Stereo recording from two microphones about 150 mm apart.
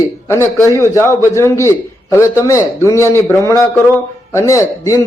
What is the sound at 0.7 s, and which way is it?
A man's voice, 20° left (ahead or behind).